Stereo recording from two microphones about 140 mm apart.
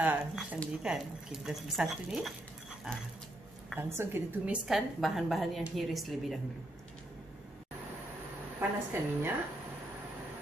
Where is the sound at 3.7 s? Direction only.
15° right (ahead or behind).